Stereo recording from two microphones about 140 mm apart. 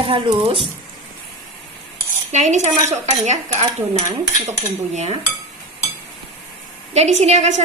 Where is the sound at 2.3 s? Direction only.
55° right (ahead or behind).